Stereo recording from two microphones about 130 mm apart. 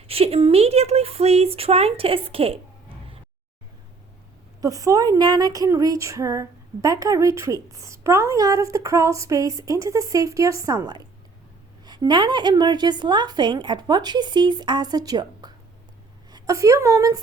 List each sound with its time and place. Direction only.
0.1 s speech: 50° right (ahead or behind)
4.6 s a woman's voice: 25° right (ahead or behind)